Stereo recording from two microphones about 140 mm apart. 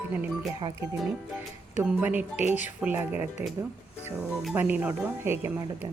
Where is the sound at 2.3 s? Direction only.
55° left (ahead or behind).